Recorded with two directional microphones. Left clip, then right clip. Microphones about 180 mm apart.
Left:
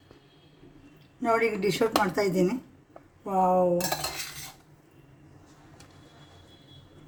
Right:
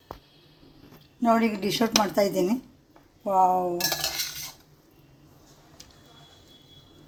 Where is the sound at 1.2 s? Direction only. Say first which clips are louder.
Right 1 dB; 30° right (ahead or behind).